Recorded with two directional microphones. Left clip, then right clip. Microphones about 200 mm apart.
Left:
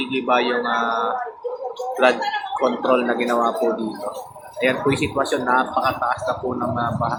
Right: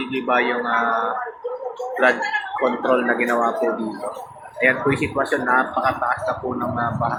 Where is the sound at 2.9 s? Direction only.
15° left (ahead or behind).